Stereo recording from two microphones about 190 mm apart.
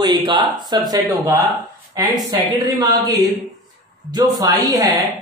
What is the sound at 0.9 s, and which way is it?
Speech, 15° right (ahead or behind).